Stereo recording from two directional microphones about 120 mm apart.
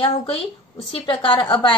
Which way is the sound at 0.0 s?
45° left (ahead or behind).